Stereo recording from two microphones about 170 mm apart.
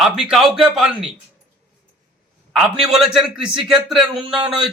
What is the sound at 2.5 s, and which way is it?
A man's voice, 5° right (ahead or behind).